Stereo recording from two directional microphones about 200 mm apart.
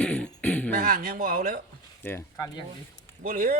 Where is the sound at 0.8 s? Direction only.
45° right (ahead or behind).